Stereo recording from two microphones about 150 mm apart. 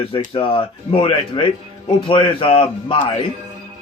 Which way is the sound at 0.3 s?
35° left (ahead or behind).